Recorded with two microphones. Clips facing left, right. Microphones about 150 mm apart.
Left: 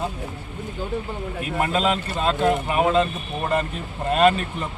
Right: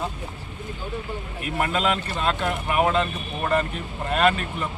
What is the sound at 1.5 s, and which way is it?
Speech, 25° left (ahead or behind).